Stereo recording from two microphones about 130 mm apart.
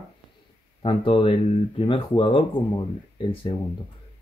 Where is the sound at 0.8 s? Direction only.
45° left (ahead or behind).